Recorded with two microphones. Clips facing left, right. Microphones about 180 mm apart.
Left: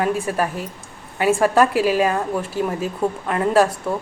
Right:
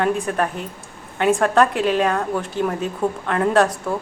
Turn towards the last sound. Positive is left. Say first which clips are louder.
# left 1 dB
turn(degrees=0)  # may be behind; listen again after turning